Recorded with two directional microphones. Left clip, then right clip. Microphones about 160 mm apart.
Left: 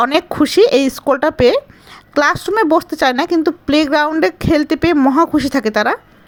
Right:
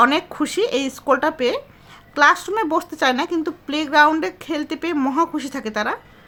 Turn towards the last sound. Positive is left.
turn(degrees=40)  # may be behind; listen again after turning